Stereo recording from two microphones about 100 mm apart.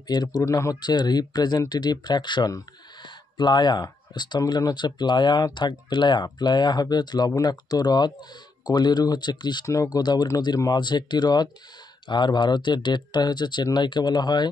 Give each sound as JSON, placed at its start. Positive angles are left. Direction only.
{"t": 0.1, "sound": "speech", "side_deg": 40}
{"t": 0.7, "sound": "speech", "side_deg": 45}
{"t": 3.0, "sound": "a sound", "side_deg": 45}
{"t": 4.5, "sound": "speech", "side_deg": 45}
{"t": 9.7, "sound": "speech", "side_deg": 35}